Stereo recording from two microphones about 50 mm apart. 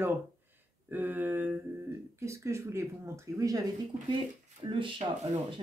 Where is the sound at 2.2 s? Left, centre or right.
Right.